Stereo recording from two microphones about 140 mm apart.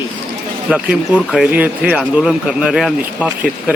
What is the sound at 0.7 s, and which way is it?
Speech, 5° right (ahead or behind).